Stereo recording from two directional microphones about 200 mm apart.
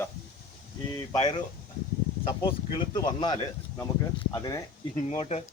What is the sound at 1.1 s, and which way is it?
Speech, 20° left (ahead or behind).